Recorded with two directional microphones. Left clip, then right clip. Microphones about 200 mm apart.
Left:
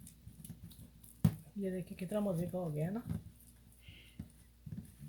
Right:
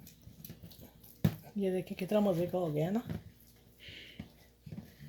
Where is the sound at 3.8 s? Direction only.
Centre (ahead or behind).